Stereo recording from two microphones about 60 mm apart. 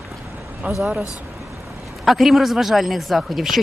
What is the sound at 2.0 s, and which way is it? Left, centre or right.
Speech, centre.